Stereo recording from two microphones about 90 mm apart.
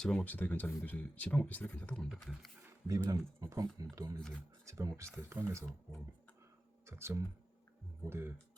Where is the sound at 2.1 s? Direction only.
Centre (ahead or behind).